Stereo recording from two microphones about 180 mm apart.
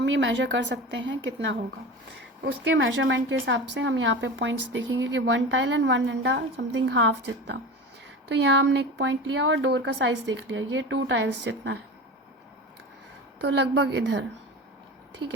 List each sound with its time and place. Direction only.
0.0 s a woman's voice: 90° right
13.4 s speech: 80° right